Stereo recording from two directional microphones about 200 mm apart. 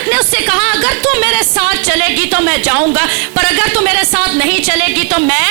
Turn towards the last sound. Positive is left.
turn(degrees=-10)  # may be behind; listen again after turning